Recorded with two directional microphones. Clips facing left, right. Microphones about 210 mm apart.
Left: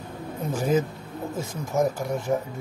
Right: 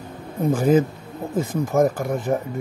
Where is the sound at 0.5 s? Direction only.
55° right (ahead or behind).